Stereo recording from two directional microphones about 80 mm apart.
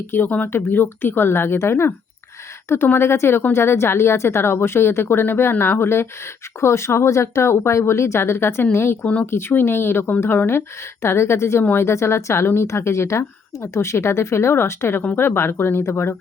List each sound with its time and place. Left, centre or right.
0.1 s a woman's voice: left